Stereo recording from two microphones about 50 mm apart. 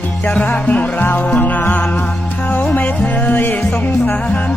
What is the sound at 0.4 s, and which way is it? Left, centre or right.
Music, left.